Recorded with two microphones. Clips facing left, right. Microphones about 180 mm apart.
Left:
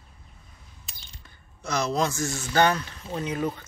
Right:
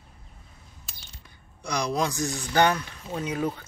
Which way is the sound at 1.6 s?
15° right (ahead or behind).